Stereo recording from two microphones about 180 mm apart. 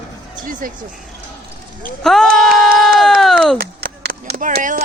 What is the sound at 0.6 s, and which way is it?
Speech, 50° right (ahead or behind).